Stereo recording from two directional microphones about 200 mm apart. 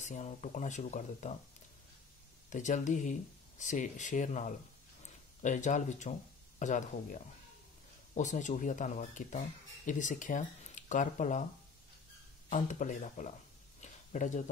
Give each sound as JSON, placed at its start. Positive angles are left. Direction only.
{"t": 0.0, "sound": "speech", "side_deg": 35}
{"t": 2.5, "sound": "speech", "side_deg": 35}
{"t": 12.4, "sound": "speech", "side_deg": 40}
{"t": 13.7, "sound": "a sound", "side_deg": 40}